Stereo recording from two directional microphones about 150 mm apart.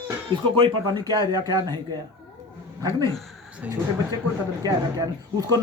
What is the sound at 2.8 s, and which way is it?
Speech, 20° left (ahead or behind).